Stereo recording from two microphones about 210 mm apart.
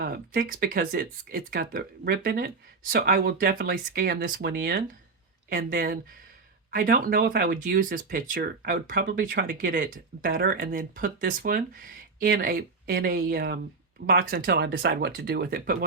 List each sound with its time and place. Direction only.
0.0 s speech: 45° right (ahead or behind)